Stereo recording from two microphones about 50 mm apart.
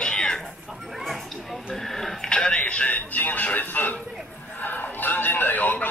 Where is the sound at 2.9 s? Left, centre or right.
Left.